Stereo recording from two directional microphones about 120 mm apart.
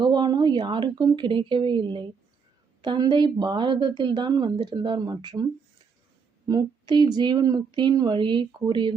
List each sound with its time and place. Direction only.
0.0 s a woman's voice: 35° right (ahead or behind)
6.5 s a woman's voice: 35° right (ahead or behind)